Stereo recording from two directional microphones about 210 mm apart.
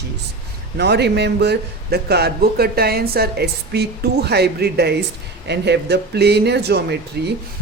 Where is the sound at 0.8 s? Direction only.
55° right (ahead or behind).